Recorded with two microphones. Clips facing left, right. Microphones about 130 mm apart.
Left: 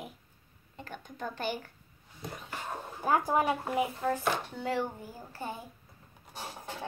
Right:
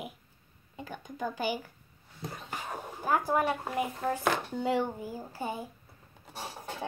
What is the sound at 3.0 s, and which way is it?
Speech, 15° left (ahead or behind).